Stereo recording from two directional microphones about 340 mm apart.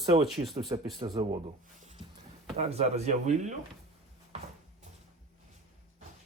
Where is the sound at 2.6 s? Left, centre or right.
Centre.